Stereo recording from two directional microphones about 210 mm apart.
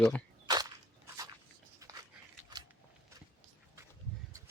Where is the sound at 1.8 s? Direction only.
15° right (ahead or behind).